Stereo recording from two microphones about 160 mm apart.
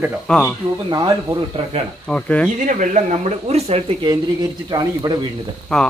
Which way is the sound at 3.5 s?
40° right (ahead or behind).